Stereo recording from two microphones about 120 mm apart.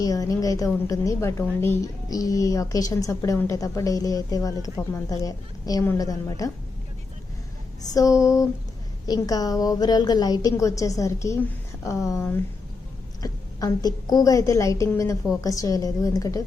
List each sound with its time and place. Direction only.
0.0 s a woman's voice: 30° left (ahead or behind)
7.8 s a woman's voice: 30° left (ahead or behind)
13.2 s a woman's voice: 30° left (ahead or behind)